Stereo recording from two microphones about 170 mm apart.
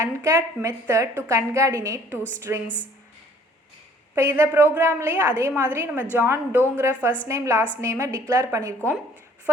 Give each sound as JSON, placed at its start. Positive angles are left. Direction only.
{"t": 0.0, "sound": "a woman's voice", "side_deg": -15}
{"t": 4.1, "sound": "a woman's voice", "side_deg": -15}